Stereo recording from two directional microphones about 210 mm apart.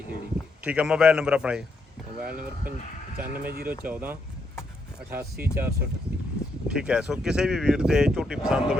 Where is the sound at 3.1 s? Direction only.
45° right (ahead or behind).